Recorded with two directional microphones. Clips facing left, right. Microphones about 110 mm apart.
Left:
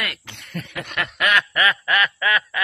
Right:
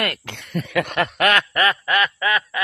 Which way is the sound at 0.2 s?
90° right.